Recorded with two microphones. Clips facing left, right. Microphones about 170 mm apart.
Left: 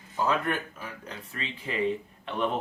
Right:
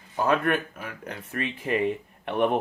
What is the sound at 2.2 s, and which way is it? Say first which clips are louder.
Speech: right 6 dB; 55° right (ahead or behind).